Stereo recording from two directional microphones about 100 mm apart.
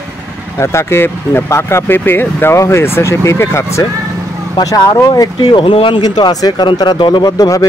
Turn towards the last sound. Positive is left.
turn(degrees=35)  # may be behind; listen again after turning